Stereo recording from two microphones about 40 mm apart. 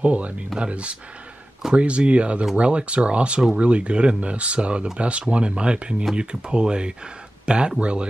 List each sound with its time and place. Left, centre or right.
0.0 s speech: right